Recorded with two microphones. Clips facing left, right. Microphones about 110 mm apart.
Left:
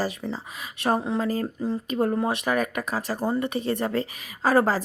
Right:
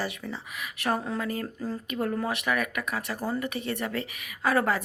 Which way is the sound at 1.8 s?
30° left (ahead or behind).